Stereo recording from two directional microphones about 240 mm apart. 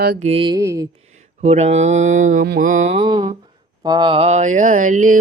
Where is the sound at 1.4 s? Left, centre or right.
Right.